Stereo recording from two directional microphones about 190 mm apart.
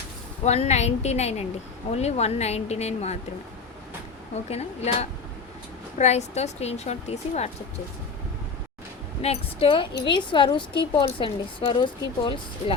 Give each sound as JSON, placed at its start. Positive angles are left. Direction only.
{"t": 0.4, "sound": "speech", "side_deg": 35}
{"t": 4.4, "sound": "speech", "side_deg": 35}
{"t": 9.2, "sound": "a woman's voice", "side_deg": 30}